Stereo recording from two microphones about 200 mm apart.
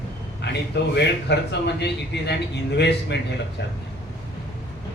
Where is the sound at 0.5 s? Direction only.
60° left (ahead or behind).